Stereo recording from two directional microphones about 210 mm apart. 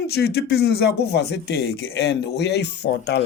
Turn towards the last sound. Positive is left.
turn(degrees=55)  # may be behind; listen again after turning